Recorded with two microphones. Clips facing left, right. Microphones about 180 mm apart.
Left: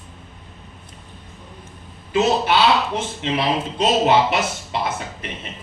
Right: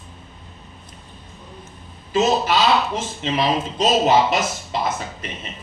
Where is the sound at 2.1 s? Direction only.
60° left (ahead or behind).